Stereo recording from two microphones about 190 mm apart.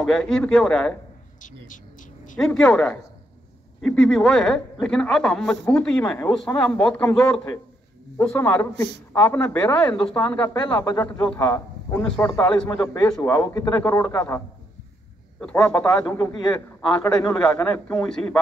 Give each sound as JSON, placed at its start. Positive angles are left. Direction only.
{"t": 0.0, "sound": "a woman's voice", "side_deg": 5}
{"t": 2.3, "sound": "a woman's voice", "side_deg": 5}
{"t": 15.4, "sound": "a woman's voice", "side_deg": 5}
{"t": 16.1, "sound": "a man's voice", "side_deg": 20}
{"t": 17.3, "sound": "a woman's voice", "side_deg": 5}